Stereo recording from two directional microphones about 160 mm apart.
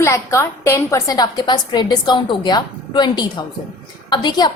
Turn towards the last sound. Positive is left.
turn(degrees=25)  # may be behind; listen again after turning